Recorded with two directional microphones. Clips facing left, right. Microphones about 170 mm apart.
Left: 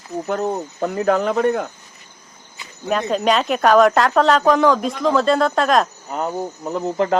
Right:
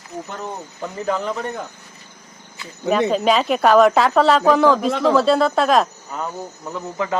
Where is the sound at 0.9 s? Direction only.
65° left (ahead or behind).